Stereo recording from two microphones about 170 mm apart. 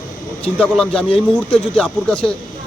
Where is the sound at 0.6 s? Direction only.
5° left (ahead or behind).